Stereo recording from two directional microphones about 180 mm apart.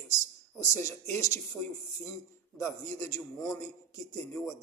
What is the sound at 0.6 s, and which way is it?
A man's voice, 15° left (ahead or behind).